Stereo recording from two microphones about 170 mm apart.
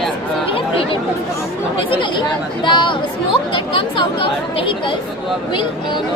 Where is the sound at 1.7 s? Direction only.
30° left (ahead or behind).